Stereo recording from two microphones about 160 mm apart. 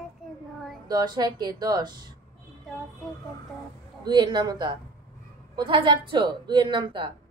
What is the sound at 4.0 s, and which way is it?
A woman's voice, 30° right (ahead or behind).